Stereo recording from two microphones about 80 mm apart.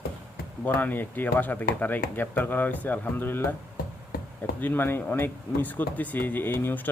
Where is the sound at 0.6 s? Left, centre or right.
Left.